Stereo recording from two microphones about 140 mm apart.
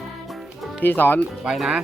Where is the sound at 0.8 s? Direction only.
15° left (ahead or behind).